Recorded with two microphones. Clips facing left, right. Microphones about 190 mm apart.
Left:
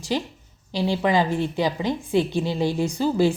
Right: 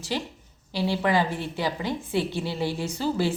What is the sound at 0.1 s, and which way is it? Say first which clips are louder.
A woman's voice: left 4 dB; 15° left (ahead or behind).